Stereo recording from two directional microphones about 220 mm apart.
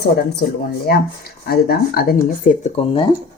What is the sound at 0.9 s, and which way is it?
Speech, 45° left (ahead or behind).